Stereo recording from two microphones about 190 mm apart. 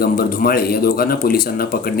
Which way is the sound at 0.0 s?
50° left (ahead or behind).